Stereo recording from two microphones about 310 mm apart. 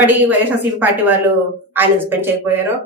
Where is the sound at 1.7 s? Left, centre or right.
Centre.